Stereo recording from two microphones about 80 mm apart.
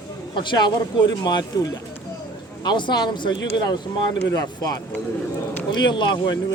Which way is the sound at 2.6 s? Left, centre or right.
Left.